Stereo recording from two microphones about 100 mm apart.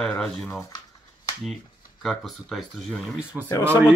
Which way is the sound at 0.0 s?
5° left (ahead or behind).